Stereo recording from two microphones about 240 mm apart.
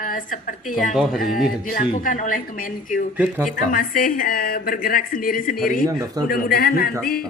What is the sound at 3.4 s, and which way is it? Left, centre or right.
Speech, left.